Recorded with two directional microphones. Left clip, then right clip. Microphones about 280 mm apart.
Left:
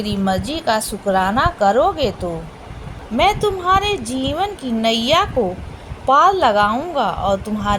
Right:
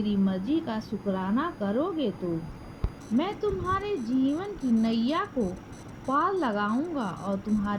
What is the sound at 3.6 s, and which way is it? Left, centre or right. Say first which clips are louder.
Speech: left 13 dB; right.